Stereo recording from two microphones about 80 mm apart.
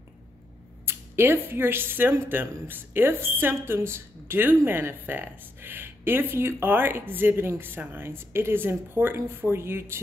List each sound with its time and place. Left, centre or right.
0.8 s speech: right